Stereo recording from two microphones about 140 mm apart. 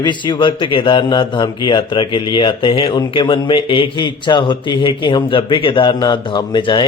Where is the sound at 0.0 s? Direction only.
35° left (ahead or behind).